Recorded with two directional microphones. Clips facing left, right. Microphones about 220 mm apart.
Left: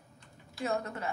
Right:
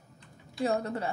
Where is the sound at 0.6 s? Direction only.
35° right (ahead or behind).